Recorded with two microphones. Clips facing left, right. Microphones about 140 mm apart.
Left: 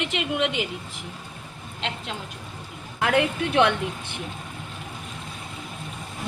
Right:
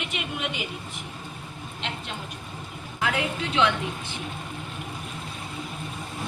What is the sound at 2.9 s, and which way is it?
A woman's voice, 60° left (ahead or behind).